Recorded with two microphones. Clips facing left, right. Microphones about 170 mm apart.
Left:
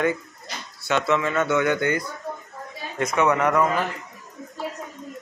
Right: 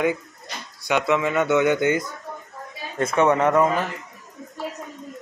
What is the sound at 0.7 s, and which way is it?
A man's voice, 15° right (ahead or behind).